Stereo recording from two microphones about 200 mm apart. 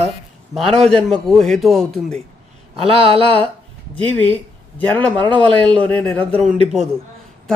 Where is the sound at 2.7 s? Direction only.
30° right (ahead or behind).